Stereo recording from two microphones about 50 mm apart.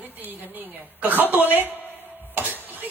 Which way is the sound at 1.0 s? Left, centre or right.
Right.